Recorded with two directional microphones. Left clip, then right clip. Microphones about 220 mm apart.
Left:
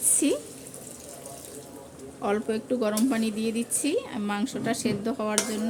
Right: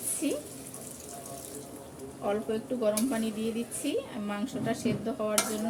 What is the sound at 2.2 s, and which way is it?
Speech, 50° left (ahead or behind).